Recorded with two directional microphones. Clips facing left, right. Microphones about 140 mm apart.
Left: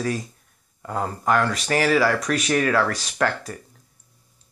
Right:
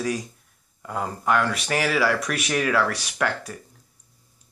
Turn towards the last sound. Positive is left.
turn(degrees=-10)  # may be behind; listen again after turning